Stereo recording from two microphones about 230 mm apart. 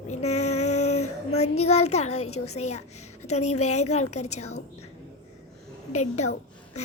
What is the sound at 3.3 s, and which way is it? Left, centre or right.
Female singing, left.